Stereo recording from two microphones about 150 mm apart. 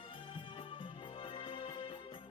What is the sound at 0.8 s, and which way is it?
Music, 35° left (ahead or behind).